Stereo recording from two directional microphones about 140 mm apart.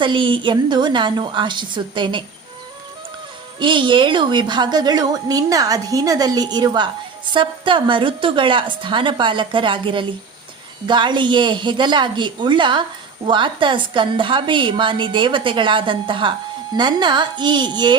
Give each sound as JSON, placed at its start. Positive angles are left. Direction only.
{"t": 0.0, "sound": "a woman's voice", "side_deg": -35}
{"t": 3.6, "sound": "a woman's voice", "side_deg": -35}